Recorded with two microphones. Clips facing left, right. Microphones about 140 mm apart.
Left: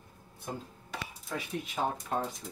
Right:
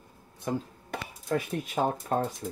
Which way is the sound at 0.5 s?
90° right.